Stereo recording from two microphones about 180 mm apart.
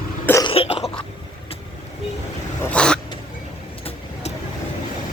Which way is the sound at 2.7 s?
5° left (ahead or behind).